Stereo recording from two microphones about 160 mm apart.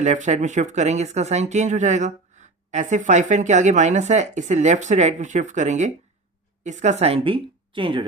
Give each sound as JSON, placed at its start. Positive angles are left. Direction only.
{"t": 0.0, "sound": "a woman's voice", "side_deg": -50}